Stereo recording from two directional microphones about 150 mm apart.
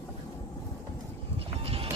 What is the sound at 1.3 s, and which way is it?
Music, 40° right (ahead or behind).